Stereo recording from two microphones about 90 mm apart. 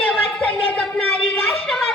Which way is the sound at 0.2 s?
15° left (ahead or behind).